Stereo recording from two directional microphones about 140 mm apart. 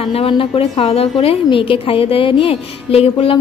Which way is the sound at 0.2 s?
40° left (ahead or behind).